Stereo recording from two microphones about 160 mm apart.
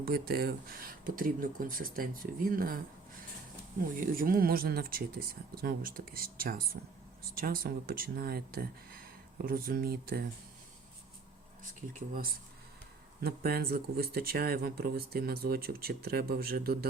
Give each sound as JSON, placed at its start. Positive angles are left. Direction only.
{"t": 0.0, "sound": "speech", "side_deg": -70}
{"t": 11.6, "sound": "speech", "side_deg": -60}
{"t": 13.2, "sound": "speech", "side_deg": -75}